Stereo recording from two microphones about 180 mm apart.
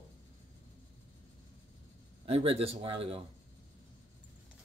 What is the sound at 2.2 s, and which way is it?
Speech, 35° right (ahead or behind).